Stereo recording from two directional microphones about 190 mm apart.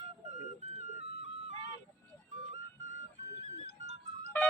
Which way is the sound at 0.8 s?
35° right (ahead or behind).